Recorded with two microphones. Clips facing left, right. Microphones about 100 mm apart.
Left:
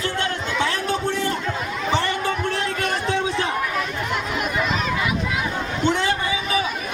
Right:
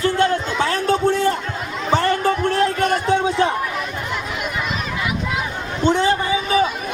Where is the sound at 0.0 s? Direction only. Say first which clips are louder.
Right 7 dB; 35° right (ahead or behind).